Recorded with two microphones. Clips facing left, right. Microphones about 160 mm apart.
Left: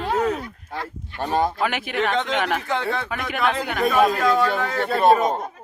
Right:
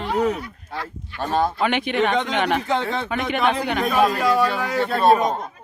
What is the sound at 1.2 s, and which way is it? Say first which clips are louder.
Speech: even; 15° left (ahead or behind).